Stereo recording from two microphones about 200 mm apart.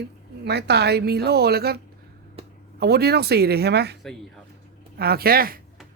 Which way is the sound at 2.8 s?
55° right (ahead or behind).